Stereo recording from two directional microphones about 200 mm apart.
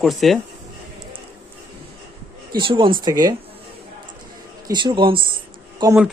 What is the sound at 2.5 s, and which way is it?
Speech, 25° right (ahead or behind).